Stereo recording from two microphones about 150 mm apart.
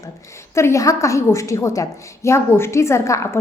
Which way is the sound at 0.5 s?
20° left (ahead or behind).